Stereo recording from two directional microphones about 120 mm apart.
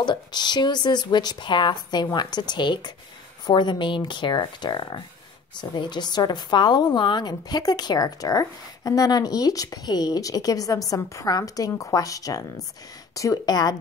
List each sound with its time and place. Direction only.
0.0 s a woman's voice: 40° left (ahead or behind)